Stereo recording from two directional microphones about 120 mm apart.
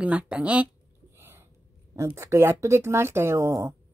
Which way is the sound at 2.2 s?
25° right (ahead or behind).